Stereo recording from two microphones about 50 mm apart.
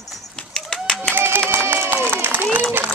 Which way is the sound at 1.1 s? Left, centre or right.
Right.